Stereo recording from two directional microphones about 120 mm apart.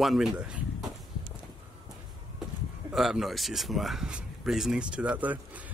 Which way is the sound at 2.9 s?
5° right (ahead or behind).